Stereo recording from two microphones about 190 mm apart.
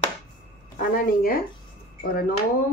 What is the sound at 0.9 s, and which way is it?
Speech, 50° left (ahead or behind).